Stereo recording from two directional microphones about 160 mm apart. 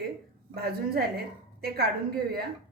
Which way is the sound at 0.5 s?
75° right (ahead or behind).